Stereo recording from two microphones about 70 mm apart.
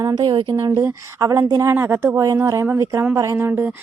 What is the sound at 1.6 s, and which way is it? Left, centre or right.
Speech, right.